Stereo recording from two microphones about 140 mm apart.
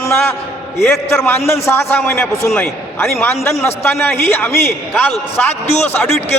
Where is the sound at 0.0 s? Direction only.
15° left (ahead or behind).